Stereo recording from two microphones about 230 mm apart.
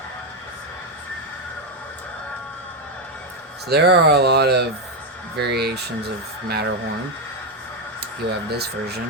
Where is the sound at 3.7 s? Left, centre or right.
Right.